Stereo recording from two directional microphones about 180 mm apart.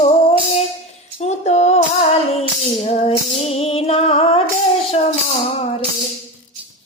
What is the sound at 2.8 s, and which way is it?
Music, 35° left (ahead or behind).